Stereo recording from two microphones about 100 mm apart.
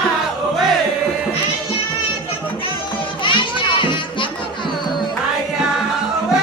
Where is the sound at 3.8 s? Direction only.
55° left (ahead or behind).